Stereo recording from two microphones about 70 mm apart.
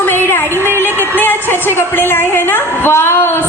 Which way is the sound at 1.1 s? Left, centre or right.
Left.